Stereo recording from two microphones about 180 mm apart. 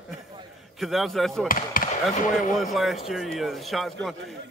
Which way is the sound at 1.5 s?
50° left (ahead or behind).